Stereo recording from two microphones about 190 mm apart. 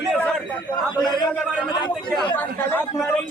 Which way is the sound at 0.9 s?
20° left (ahead or behind).